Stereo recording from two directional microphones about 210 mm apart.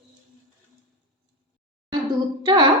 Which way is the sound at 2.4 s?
20° right (ahead or behind).